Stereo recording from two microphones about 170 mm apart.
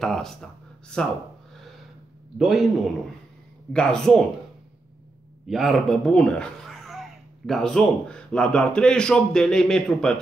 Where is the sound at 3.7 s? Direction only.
5° left (ahead or behind).